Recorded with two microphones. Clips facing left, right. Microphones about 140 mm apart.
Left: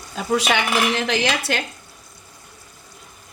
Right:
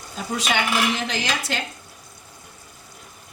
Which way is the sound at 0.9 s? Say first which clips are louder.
Left 5 dB; 65° left (ahead or behind).